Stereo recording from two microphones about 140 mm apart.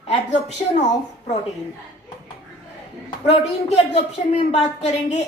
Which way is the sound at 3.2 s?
50° left (ahead or behind).